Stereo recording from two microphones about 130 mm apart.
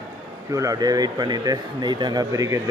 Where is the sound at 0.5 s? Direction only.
25° right (ahead or behind).